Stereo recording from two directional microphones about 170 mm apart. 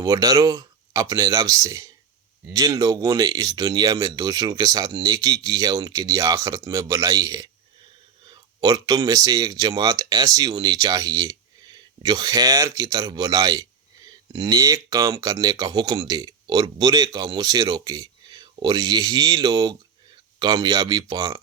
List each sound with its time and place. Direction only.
0.0 s speech: 20° right (ahead or behind)